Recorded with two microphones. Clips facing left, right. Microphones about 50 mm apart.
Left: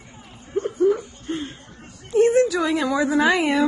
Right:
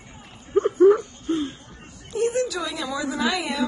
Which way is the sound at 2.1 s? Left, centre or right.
Left.